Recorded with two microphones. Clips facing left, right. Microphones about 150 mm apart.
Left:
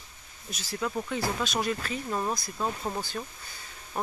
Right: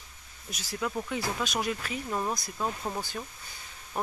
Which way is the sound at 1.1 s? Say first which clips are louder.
Left 2 dB; 15° right (ahead or behind).